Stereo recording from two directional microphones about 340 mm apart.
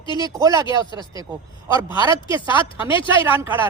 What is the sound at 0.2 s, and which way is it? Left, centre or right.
Speech, centre.